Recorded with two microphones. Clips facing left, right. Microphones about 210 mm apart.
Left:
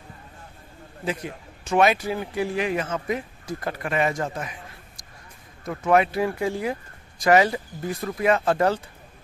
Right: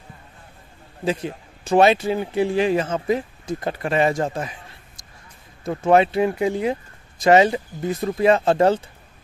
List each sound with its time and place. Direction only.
1.0 s speech: 30° right (ahead or behind)